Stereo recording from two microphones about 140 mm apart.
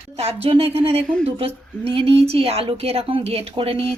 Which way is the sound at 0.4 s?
45° right (ahead or behind).